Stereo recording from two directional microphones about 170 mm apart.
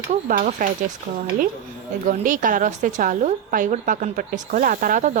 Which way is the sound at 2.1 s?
50° right (ahead or behind).